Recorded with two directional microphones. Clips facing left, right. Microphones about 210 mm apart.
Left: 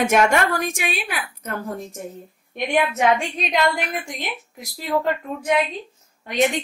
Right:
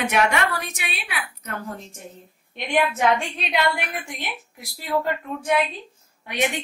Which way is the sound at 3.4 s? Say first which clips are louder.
Left 2 dB; 40° left (ahead or behind).